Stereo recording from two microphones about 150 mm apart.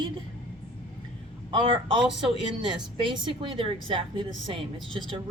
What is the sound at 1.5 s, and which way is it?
Speech, 35° right (ahead or behind).